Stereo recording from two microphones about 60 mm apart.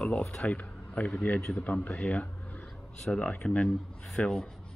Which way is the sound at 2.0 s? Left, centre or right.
Left.